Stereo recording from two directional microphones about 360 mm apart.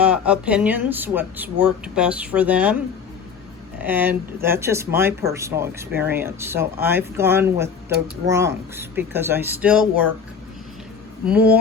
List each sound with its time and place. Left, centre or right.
0.0 s speech: centre
11.3 s speech: centre